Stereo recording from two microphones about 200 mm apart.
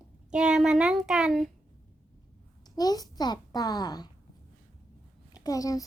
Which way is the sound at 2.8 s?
20° left (ahead or behind).